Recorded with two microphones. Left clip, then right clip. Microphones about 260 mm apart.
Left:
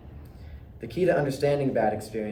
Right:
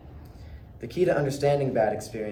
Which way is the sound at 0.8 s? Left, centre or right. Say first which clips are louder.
Even; centre.